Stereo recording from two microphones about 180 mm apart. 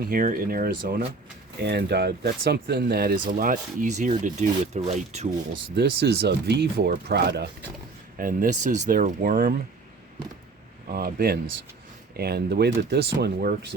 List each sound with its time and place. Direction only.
0.0 s speech: 50° right (ahead or behind)
5.7 s speech: 65° right (ahead or behind)
8.2 s speech: 50° right (ahead or behind)
10.9 s speech: 60° right (ahead or behind)